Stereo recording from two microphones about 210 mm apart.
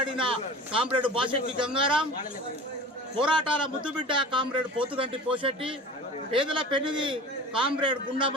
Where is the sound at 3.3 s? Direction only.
25° right (ahead or behind).